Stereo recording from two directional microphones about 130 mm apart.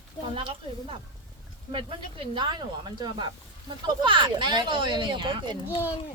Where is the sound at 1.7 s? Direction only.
40° right (ahead or behind).